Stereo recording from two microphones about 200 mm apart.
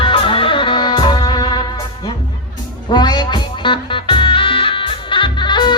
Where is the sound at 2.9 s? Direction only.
20° left (ahead or behind).